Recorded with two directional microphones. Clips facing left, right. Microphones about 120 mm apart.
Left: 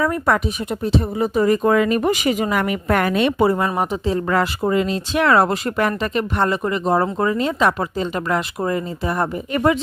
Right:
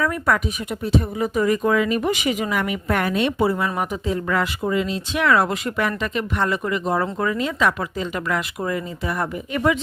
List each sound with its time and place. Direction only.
0.0 s speech: 30° left (ahead or behind); by 3.7 s 45° left (ahead or behind)
3.8 s speech: 35° left (ahead or behind)